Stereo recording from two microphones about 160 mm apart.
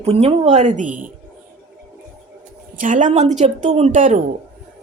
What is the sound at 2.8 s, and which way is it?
Speech, 50° right (ahead or behind).